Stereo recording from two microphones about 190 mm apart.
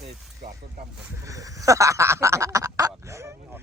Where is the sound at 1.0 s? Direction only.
15° right (ahead or behind).